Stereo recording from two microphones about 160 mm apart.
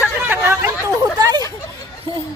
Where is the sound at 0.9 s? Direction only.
25° right (ahead or behind).